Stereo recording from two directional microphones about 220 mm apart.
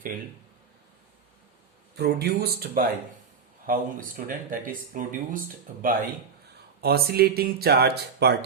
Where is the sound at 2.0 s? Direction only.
45° right (ahead or behind).